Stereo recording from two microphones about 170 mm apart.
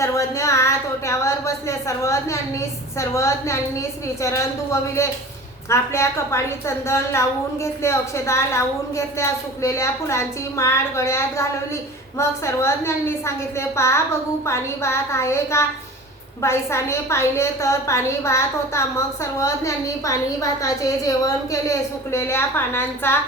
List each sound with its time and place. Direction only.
0.0 s a woman's voice: 20° left (ahead or behind)